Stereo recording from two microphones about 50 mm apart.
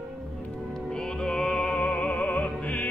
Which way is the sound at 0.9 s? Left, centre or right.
Centre.